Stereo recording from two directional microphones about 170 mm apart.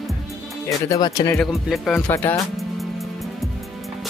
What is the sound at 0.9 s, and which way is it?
Speech, 25° left (ahead or behind).